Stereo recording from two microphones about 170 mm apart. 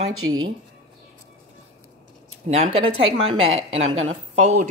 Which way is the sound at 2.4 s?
40° right (ahead or behind).